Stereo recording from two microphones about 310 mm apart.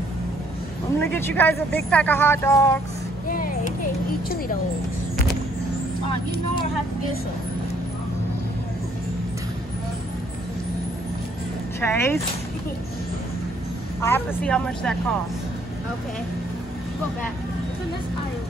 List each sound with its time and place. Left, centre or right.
0.9 s speech: centre
3.3 s a sound: left
11.8 s speech: centre
14.0 s speech: centre